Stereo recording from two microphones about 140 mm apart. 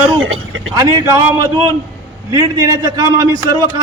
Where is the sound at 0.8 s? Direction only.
25° right (ahead or behind).